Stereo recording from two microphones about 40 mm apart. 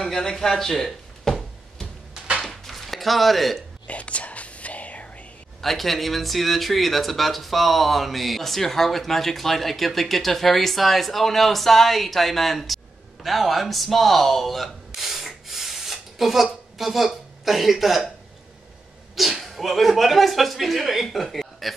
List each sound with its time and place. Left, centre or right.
0.0 s speech: centre
2.4 s a sound: centre
3.8 s whispering: left
5.6 s speech: centre
15.0 s a sound: centre
16.7 s a woman's voice: centre
19.1 s speech: centre